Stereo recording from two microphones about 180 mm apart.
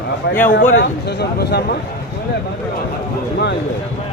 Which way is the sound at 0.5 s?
60° left (ahead or behind).